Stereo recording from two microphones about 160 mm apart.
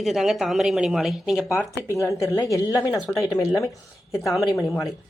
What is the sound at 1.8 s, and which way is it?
A woman's voice, 20° left (ahead or behind).